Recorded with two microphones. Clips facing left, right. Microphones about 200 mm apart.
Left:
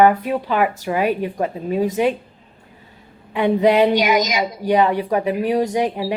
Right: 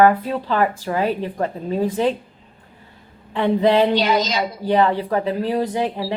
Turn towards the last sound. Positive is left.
turn(degrees=15)  # may be behind; listen again after turning